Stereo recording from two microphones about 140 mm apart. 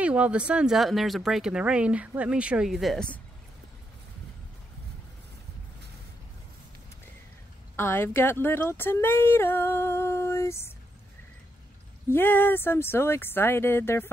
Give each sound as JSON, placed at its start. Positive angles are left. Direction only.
{"t": 0.0, "sound": "speech", "side_deg": -10}
{"t": 7.7, "sound": "speech", "side_deg": 15}
{"t": 12.1, "sound": "speech", "side_deg": 15}